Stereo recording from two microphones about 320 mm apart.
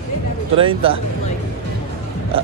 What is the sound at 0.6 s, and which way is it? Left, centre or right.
Speech, centre.